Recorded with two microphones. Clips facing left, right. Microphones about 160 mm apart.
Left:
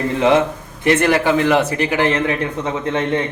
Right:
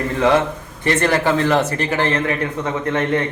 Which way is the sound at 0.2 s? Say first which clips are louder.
Left 1 dB; 15° left (ahead or behind).